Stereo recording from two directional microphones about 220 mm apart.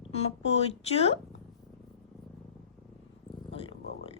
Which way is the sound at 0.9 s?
30° left (ahead or behind).